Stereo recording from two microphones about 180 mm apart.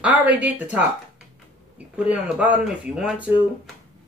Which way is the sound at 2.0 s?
5° right (ahead or behind).